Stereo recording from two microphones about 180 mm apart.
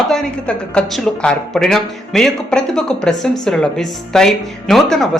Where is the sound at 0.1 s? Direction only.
5° left (ahead or behind).